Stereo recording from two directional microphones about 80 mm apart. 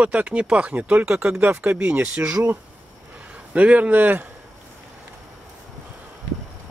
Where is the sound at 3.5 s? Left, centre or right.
Centre.